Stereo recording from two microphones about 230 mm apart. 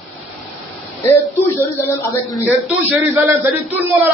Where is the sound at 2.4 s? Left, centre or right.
Centre.